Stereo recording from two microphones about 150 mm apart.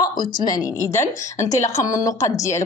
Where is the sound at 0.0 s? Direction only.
30° left (ahead or behind).